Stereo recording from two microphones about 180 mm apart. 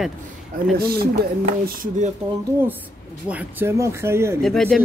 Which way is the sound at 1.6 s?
50° right (ahead or behind).